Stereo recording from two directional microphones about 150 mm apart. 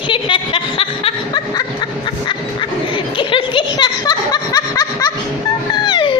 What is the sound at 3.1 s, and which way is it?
Snicker, 35° left (ahead or behind).